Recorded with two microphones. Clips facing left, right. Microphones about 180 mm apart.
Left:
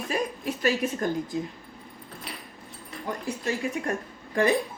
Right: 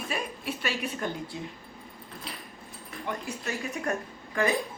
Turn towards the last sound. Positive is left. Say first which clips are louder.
# left 4 dB
turn(degrees=30)  # may be behind; listen again after turning